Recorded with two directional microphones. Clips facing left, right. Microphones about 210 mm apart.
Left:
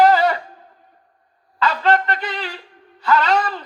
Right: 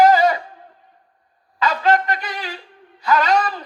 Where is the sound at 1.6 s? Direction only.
15° right (ahead or behind).